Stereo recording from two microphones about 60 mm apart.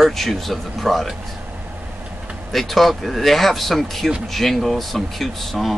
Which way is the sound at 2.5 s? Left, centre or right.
Centre.